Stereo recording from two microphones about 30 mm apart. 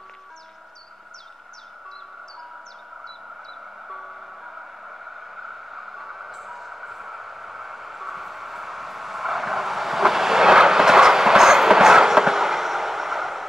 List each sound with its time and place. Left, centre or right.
3.9 s music: centre